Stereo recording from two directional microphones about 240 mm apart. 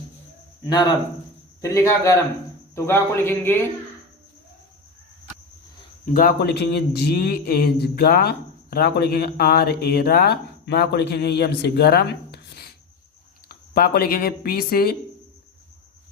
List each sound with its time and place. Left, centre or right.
0.7 s a man's voice: centre
6.1 s a man's voice: left